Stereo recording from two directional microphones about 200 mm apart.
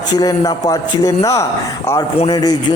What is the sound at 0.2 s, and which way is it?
A man's voice, 20° left (ahead or behind).